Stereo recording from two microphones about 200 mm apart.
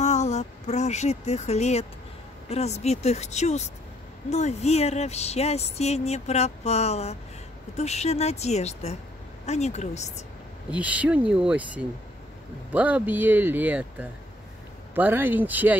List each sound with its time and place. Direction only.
0.0 s a sound: 35° left (ahead or behind)
2.5 s speech: 30° left (ahead or behind)
10.7 s speech: 5° right (ahead or behind)